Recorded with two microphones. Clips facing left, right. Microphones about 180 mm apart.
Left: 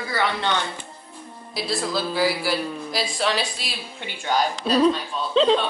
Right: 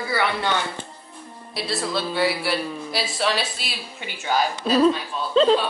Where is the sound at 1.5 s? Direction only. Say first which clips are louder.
Left 1 dB; centre (ahead or behind).